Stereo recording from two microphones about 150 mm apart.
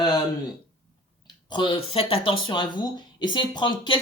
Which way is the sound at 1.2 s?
30° left (ahead or behind).